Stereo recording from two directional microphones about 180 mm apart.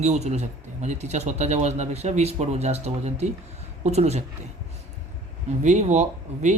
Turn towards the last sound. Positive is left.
turn(degrees=-40)  # may be behind; listen again after turning